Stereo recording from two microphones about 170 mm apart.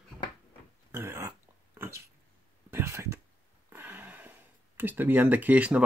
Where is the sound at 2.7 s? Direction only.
15° right (ahead or behind).